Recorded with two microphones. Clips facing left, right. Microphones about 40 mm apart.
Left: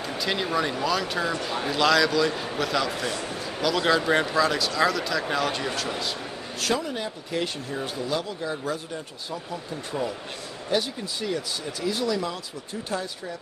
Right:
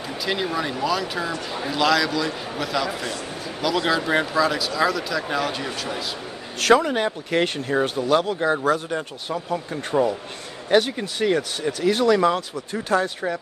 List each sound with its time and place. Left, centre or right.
0.2 s a man's voice: centre
6.6 s speech: right